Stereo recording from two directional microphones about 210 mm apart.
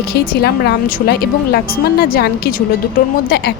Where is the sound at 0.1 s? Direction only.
50° left (ahead or behind).